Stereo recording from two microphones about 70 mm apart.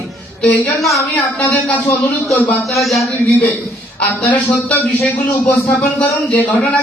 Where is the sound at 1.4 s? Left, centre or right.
Centre.